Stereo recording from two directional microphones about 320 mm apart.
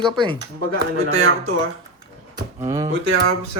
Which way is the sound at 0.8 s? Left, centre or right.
Right.